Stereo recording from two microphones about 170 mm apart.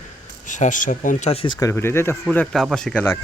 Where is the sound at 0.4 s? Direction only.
50° left (ahead or behind).